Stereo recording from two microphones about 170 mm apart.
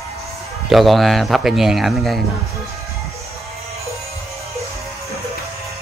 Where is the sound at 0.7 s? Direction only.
Centre (ahead or behind).